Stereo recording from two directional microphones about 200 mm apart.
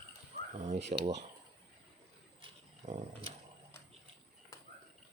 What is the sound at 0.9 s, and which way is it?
Speech, 35° right (ahead or behind).